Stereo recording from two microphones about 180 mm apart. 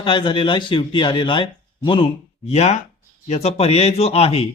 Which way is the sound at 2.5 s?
40° left (ahead or behind).